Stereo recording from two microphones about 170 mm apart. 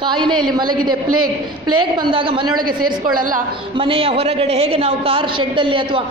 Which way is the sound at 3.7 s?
30° right (ahead or behind).